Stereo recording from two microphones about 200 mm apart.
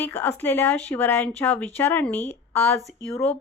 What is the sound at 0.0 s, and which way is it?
Speech, 10° left (ahead or behind).